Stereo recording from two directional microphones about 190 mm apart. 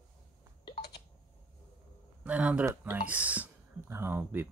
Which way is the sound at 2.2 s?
5° right (ahead or behind).